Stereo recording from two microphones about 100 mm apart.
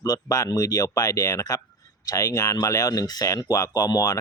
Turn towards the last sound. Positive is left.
turn(degrees=35)  # may be behind; listen again after turning